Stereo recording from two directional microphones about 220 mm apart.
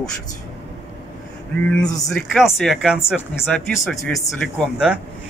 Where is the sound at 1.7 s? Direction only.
5° left (ahead or behind).